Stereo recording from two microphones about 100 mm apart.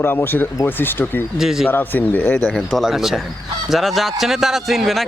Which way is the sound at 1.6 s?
20° left (ahead or behind).